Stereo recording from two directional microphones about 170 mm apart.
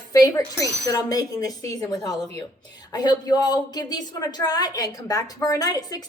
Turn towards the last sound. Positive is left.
turn(degrees=20)  # may be behind; listen again after turning